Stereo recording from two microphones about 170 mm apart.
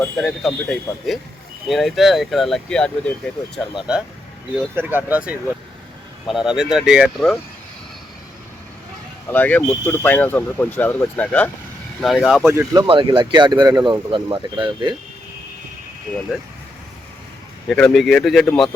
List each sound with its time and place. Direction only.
0.0 s speech: centre (ahead or behind)
4.7 s speech: 10° right (ahead or behind)
9.3 s speech: 10° left (ahead or behind)
12.5 s speech: 15° right (ahead or behind)
12.9 s speech: 30° right (ahead or behind)
17.7 s speech: 5° left (ahead or behind)